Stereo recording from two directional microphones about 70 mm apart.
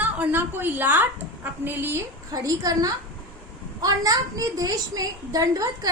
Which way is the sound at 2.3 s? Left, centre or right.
Right.